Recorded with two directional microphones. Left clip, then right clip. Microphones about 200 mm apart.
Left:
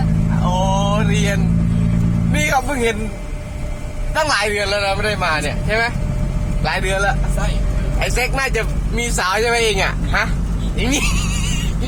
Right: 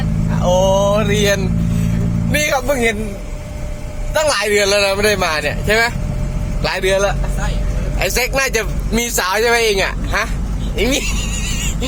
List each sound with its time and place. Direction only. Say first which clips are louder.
0.5 s mantra: right 7 dB; 45° right (ahead or behind)
2.3 s a man's voice: right 2 dB; 45° right (ahead or behind)
4.2 s a man's voice: right 3 dB; 50° right (ahead or behind); by 11.2 s 15° right (ahead or behind)